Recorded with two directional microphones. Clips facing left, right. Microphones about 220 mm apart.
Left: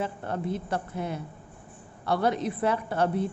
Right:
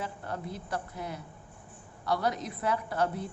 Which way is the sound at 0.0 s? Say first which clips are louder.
Left 6 dB; 25° left (ahead or behind).